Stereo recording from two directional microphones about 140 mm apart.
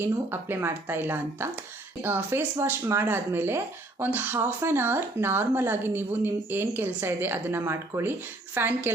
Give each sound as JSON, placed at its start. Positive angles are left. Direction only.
{"t": 0.0, "sound": "speech", "side_deg": -15}